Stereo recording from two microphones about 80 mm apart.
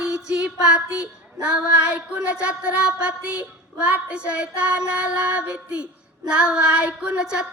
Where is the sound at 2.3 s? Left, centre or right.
Centre.